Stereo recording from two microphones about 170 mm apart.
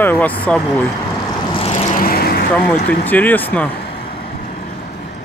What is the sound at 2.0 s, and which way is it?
Vehicle, 60° left (ahead or behind).